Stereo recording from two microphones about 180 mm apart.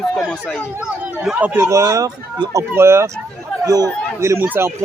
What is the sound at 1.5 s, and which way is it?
A man's voice, 15° right (ahead or behind).